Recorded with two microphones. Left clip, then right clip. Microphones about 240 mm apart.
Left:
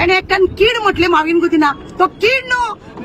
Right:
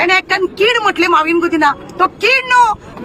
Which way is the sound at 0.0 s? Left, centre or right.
Centre.